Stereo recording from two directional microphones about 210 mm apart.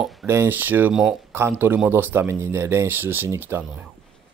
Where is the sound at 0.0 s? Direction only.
Centre (ahead or behind).